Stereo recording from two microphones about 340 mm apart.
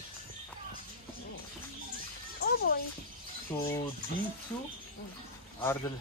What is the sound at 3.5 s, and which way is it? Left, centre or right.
Speech, centre.